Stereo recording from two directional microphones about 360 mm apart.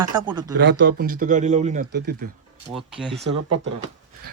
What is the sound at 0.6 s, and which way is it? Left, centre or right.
Speech, right.